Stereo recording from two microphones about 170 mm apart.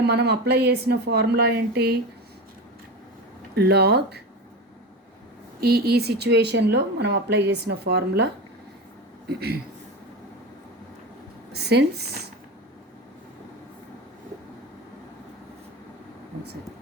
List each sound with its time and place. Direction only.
0.1 s speech: 75° right (ahead or behind)
3.5 s speech: 70° right (ahead or behind)
5.5 s speech: 65° right (ahead or behind)
11.5 s speech: 75° right (ahead or behind)